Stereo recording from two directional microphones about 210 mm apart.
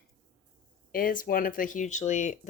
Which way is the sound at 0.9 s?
40° left (ahead or behind).